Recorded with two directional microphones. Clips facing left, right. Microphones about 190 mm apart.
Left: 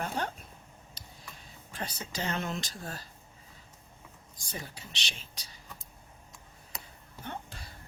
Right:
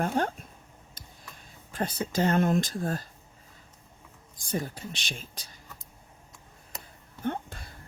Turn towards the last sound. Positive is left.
turn(degrees=-50)  # may be behind; listen again after turning